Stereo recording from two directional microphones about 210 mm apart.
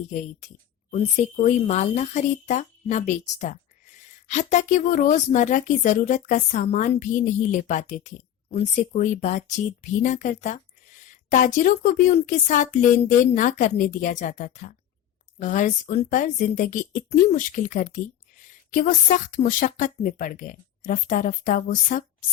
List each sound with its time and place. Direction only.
0.1 s speech: 35° left (ahead or behind)